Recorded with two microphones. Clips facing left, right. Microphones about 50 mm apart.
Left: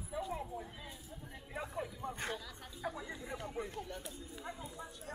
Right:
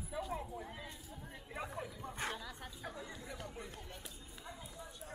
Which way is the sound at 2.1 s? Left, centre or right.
Centre.